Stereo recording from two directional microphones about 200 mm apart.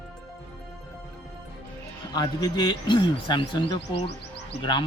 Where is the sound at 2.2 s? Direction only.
20° left (ahead or behind).